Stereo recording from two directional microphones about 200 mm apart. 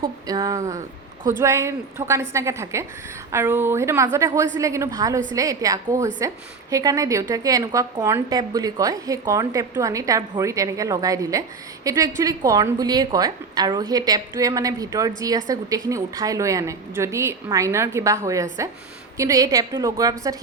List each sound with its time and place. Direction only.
0.0 s a woman's voice: 20° right (ahead or behind)